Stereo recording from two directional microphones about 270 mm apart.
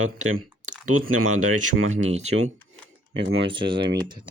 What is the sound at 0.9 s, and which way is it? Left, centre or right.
Speech, right.